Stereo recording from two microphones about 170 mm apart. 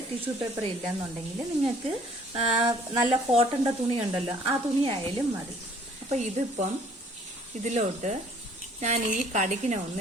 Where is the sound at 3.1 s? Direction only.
35° right (ahead or behind).